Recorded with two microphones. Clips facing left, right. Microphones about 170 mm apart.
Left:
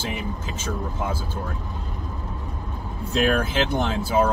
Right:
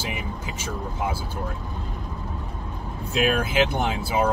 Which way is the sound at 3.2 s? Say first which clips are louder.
Right 1 dB; 15° right (ahead or behind).